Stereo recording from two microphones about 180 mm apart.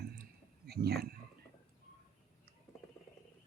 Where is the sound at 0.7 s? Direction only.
60° right (ahead or behind).